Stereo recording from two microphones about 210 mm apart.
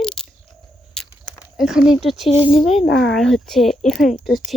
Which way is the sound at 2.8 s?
55° left (ahead or behind).